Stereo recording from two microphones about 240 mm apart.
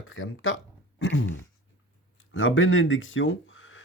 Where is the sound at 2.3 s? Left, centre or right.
Left.